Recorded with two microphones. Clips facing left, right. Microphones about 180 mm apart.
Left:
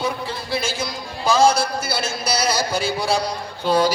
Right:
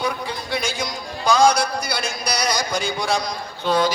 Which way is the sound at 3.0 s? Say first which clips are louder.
Left 2 dB; 30° left (ahead or behind).